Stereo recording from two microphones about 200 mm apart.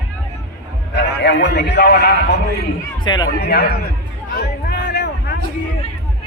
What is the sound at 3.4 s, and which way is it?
Speech, 50° left (ahead or behind).